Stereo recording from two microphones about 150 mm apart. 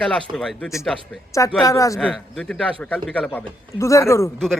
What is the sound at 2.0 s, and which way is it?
Speech, 5° left (ahead or behind).